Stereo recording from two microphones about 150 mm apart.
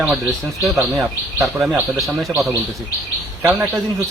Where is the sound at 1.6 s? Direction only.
Centre (ahead or behind).